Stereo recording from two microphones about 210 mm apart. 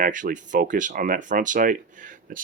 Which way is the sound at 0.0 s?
40° right (ahead or behind).